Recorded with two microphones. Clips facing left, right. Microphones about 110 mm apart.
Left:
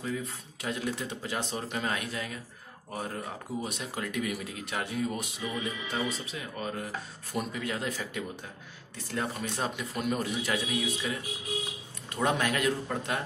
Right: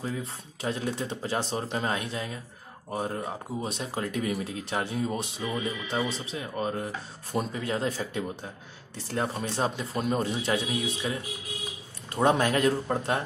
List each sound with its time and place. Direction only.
0.0 s speech: 30° right (ahead or behind)